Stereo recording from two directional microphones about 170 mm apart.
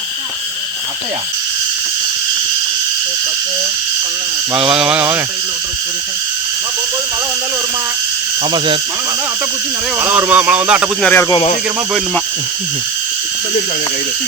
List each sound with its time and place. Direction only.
4.5 s a sound: 5° right (ahead or behind)
8.5 s speech: 30° right (ahead or behind)
10.0 s speech: 10° right (ahead or behind)
11.0 s speech: 10° left (ahead or behind)
11.3 s speech: 35° left (ahead or behind)